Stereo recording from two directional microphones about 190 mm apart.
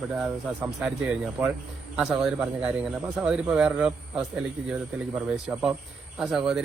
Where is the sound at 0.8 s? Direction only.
5° right (ahead or behind).